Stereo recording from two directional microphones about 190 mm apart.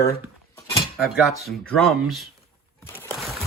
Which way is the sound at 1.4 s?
5° left (ahead or behind).